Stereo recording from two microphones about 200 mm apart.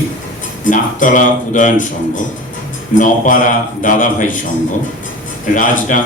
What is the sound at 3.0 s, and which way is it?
Speech, 40° left (ahead or behind).